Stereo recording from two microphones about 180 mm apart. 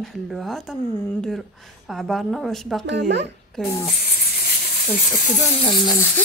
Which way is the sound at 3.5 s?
Centre (ahead or behind).